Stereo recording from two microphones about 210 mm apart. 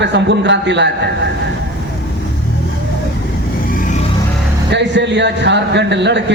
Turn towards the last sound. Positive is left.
turn(degrees=-55)  # may be behind; listen again after turning